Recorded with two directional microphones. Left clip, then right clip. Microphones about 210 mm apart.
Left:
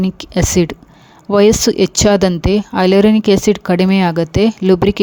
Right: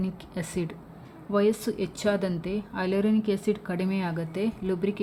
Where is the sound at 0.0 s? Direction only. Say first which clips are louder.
Left 17 dB; 50° left (ahead or behind).